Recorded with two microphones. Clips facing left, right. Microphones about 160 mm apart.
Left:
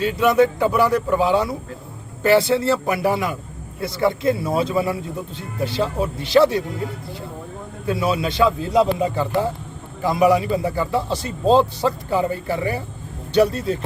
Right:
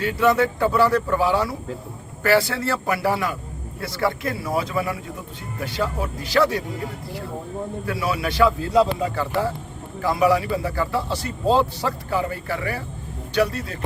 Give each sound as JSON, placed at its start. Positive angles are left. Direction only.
{"t": 0.0, "sound": "speech", "side_deg": 20}
{"t": 7.9, "sound": "speech", "side_deg": 25}